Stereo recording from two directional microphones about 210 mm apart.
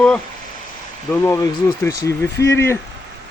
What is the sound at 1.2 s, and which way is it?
Speech, 15° left (ahead or behind).